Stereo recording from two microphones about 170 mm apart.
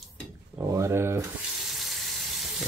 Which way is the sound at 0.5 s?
15° right (ahead or behind).